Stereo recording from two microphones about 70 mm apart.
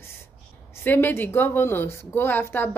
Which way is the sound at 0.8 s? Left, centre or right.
Left.